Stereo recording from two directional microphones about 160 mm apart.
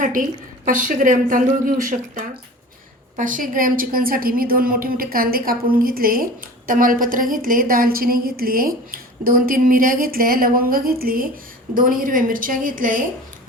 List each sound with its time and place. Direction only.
0.0 s a woman's voice: 55° right (ahead or behind)